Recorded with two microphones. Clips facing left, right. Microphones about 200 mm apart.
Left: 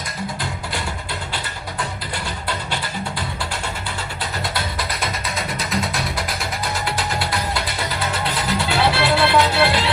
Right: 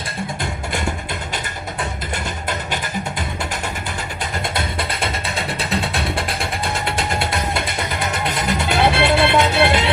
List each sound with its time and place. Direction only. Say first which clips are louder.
4.2 s music: right 2 dB; 25° right (ahead or behind)